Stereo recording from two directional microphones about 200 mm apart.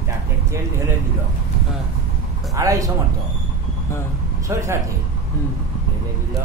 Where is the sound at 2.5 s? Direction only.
15° right (ahead or behind).